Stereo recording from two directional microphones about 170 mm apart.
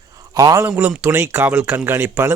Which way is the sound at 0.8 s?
10° right (ahead or behind).